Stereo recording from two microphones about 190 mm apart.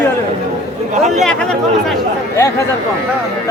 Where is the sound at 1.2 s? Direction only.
5° left (ahead or behind).